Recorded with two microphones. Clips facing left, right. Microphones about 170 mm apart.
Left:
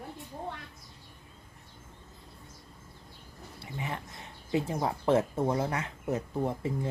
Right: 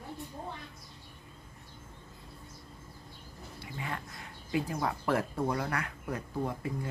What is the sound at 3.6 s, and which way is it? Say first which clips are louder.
Speech: left 2 dB; 20° left (ahead or behind).